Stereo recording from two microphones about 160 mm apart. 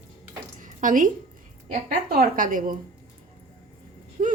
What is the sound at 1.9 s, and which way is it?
Speech, 70° right (ahead or behind).